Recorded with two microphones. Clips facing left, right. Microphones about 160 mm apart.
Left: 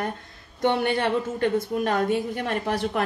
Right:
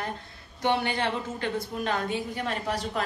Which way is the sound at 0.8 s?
50° left (ahead or behind).